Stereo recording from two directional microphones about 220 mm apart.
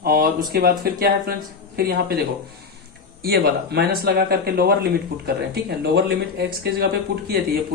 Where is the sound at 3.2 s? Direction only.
45° right (ahead or behind).